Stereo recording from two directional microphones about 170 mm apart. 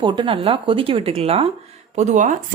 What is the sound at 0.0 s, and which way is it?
Speech, 30° right (ahead or behind).